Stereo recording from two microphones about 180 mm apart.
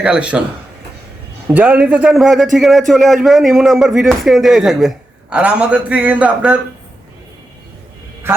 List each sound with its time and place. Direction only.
0.0 s a man's voice: 5° right (ahead or behind)
1.5 s a man's voice: 5° right (ahead or behind)